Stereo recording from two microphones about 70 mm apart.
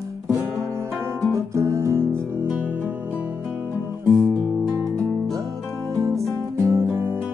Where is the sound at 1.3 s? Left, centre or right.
Right.